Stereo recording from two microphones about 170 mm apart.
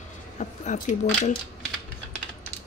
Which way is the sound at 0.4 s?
45° left (ahead or behind).